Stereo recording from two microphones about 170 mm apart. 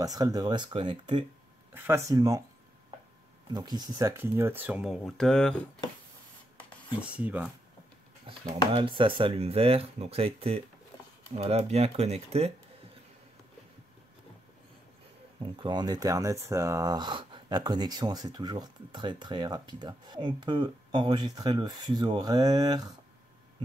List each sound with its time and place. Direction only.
0.0 s speech: 20° right (ahead or behind)
1.7 s speech: 15° right (ahead or behind)
3.5 s speech: 25° right (ahead or behind); by 5.6 s 5° left (ahead or behind)
7.0 s speech: 10° right (ahead or behind)
8.7 s speech: 30° right (ahead or behind)
15.5 s speech: 25° right (ahead or behind)